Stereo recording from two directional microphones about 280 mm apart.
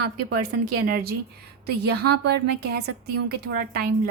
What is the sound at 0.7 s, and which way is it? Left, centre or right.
A woman's voice, right.